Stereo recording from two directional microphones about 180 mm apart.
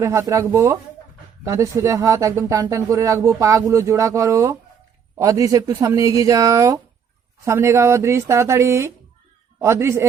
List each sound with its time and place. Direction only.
0.0 s speech: 15° right (ahead or behind)